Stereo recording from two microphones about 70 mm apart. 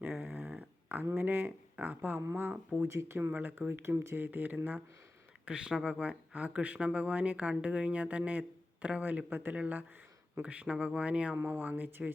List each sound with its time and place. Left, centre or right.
0.1 s a sound: centre
1.1 s speech: right
2.8 s speech: right
5.5 s speech: centre; by 12.1 s right